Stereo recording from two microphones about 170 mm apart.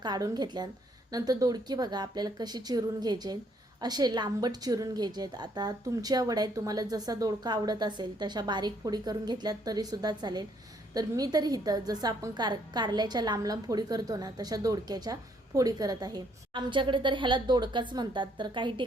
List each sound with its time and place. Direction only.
0.0 s a woman's voice: 25° right (ahead or behind)